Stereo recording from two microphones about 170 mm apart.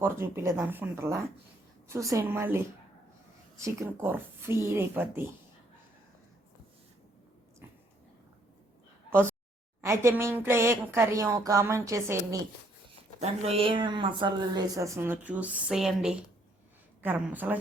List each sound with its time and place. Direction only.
0.0 s a woman's voice: 15° right (ahead or behind)
3.6 s a woman's voice: 15° right (ahead or behind)
9.8 s a woman's voice: 15° right (ahead or behind)
13.1 s a woman's voice: 40° right (ahead or behind); by 17.6 s 10° right (ahead or behind)